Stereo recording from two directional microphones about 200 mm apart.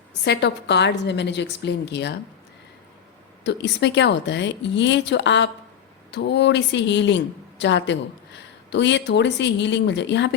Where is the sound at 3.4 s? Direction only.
60° left (ahead or behind).